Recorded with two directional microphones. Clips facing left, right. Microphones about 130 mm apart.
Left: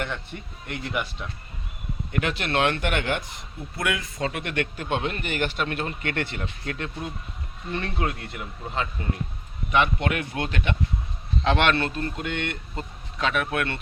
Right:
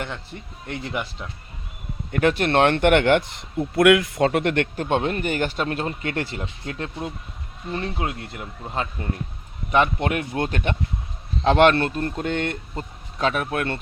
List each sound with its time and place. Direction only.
0.7 s speech: 25° right (ahead or behind)
2.1 s speech: 45° right (ahead or behind); by 7.1 s 30° right (ahead or behind)
7.7 s speech: 15° right (ahead or behind)
9.7 s speech: 40° right (ahead or behind)